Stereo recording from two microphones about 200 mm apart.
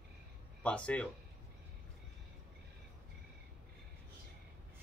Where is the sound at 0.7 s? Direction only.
5° left (ahead or behind).